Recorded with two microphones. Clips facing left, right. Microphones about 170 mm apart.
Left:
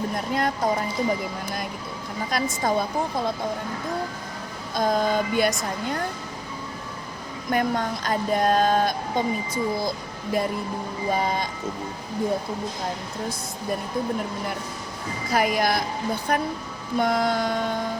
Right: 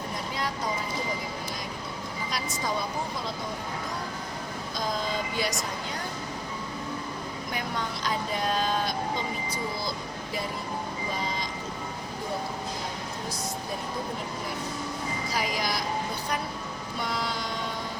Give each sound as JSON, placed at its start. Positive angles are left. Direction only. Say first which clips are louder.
{"t": 0.3, "sound": "speech", "louder": "left 8 dB", "side_deg": 55}
{"t": 2.3, "sound": "speech", "louder": "left 8 dB", "side_deg": 50}
{"t": 4.7, "sound": "speech", "louder": "left 9 dB", "side_deg": 55}
{"t": 7.5, "sound": "speech", "louder": "left 10 dB", "side_deg": 50}
{"t": 15.3, "sound": "speech", "louder": "left 10 dB", "side_deg": 55}